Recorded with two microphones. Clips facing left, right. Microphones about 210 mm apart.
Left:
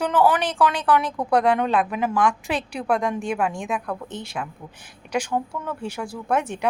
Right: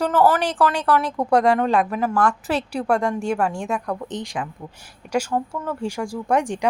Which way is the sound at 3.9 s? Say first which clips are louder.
Right 3 dB; 15° right (ahead or behind).